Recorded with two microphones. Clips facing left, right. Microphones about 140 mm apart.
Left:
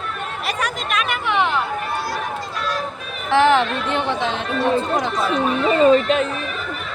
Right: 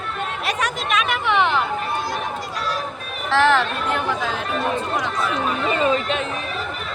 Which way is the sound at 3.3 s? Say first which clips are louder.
Left 2 dB; 15° left (ahead or behind).